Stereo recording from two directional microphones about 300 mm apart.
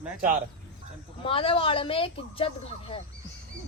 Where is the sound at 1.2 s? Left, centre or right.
Centre.